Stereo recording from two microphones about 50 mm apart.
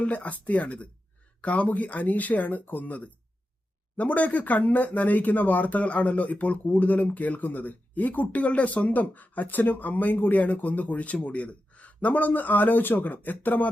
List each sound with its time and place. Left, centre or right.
0.0 s speech: left